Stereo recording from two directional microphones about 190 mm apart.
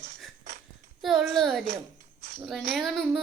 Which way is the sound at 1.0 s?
Centre (ahead or behind).